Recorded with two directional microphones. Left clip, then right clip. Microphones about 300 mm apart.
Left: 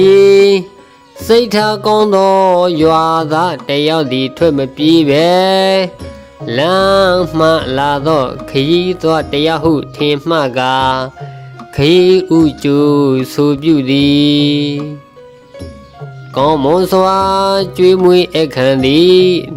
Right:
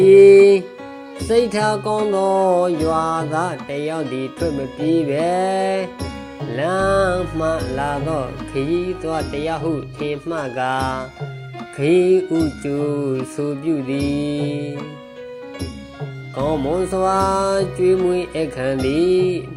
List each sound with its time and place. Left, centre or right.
0.2 s music: left
1.3 s mantra: left
8.5 s mantra: left
9.0 s mantra: left
16.3 s mantra: left
18.8 s mantra: left